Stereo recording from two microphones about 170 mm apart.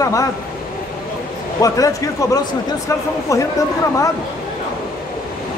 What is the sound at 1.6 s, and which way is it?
Speech, 20° left (ahead or behind).